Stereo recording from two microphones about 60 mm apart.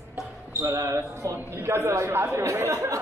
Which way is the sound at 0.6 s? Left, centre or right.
Right.